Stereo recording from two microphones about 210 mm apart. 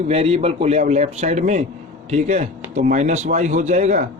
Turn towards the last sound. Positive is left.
turn(degrees=-35)  # may be behind; listen again after turning